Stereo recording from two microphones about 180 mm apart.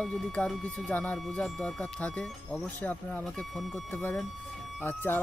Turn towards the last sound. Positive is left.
turn(degrees=10)  # may be behind; listen again after turning